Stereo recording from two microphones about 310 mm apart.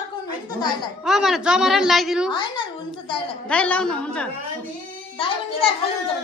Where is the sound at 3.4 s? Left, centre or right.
Centre.